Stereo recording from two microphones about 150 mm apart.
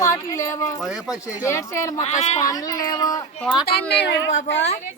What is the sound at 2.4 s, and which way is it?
Speech, 25° left (ahead or behind).